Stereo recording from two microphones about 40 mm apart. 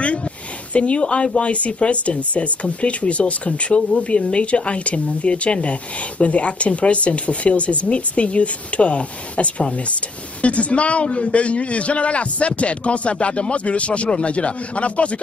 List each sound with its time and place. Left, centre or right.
0.7 s speech: left